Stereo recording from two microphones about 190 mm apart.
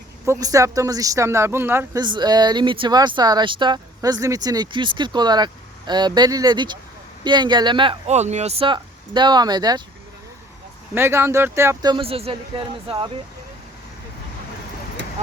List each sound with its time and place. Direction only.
0.3 s speech: 20° right (ahead or behind)
10.9 s speech: 10° right (ahead or behind)